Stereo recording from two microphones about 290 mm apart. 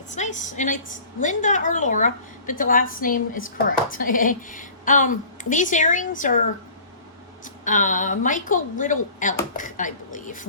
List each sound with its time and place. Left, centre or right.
0.1 s a woman's voice: left
7.4 s a woman's voice: left